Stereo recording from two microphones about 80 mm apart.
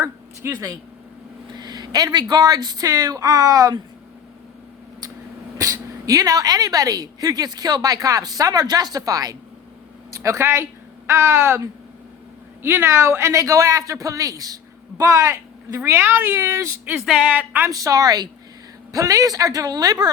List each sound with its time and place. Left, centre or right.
0.0 s a sound: right
1.5 s a woman's voice: right
5.5 s a woman's voice: right
16.3 s a man's voice: right
17.2 s speech: right
17.7 s a woman's voice: right